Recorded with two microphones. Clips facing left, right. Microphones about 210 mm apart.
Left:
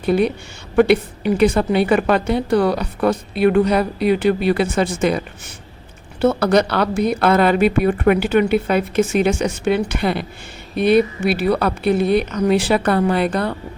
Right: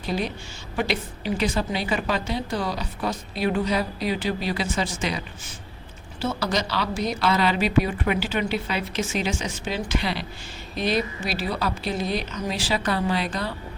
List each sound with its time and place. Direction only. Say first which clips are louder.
0.0 s a woman's voice: left 11 dB; 60° left (ahead or behind)
6.2 s a woman's voice: left 11 dB; 60° left (ahead or behind)